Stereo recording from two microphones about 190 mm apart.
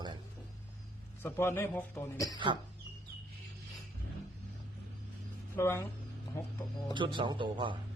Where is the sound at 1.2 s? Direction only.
15° left (ahead or behind).